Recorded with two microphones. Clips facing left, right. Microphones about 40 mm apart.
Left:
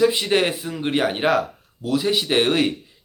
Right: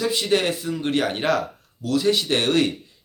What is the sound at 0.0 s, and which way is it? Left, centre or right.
Speech, left.